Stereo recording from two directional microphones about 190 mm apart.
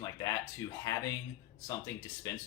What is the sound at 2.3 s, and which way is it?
Speech, 20° left (ahead or behind).